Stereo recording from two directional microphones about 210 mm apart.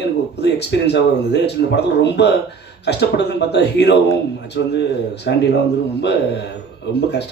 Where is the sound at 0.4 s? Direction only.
55° left (ahead or behind).